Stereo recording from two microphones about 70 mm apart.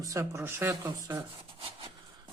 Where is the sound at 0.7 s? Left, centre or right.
Right.